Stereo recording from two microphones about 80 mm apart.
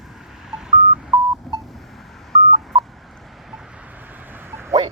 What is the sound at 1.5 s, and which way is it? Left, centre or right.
Telephone dialing, centre.